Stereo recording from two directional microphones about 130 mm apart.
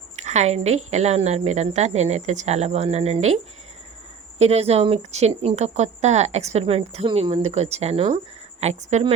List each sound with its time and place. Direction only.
0.2 s a woman's voice: 60° right (ahead or behind)